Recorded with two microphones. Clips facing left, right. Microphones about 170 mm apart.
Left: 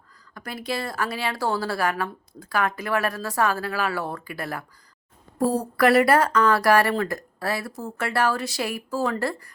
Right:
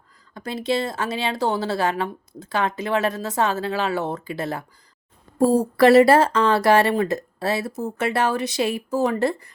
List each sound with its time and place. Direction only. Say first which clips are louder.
0.3 s a woman's voice: right 6 dB; 25° right (ahead or behind)